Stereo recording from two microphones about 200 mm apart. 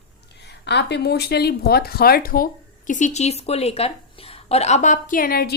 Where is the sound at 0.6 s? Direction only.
55° left (ahead or behind).